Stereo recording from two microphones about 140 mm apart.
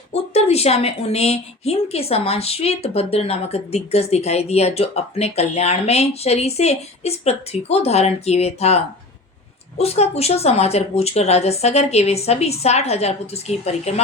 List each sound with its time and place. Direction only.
0.1 s a woman's voice: 50° left (ahead or behind)